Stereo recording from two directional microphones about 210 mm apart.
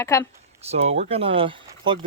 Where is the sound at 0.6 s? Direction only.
30° right (ahead or behind).